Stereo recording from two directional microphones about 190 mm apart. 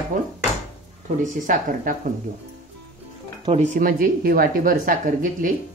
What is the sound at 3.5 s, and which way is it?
Speech, 40° right (ahead or behind).